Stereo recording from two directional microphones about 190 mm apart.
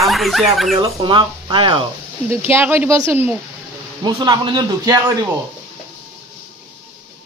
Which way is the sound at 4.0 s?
20° right (ahead or behind).